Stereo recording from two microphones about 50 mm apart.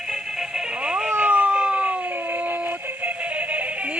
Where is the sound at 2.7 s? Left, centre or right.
Right.